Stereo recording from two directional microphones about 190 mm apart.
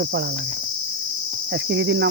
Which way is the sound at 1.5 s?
65° right (ahead or behind).